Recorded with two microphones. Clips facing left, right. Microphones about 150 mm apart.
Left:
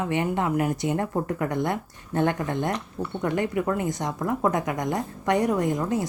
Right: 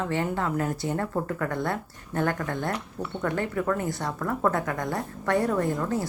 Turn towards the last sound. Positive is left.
turn(degrees=15)  # may be behind; listen again after turning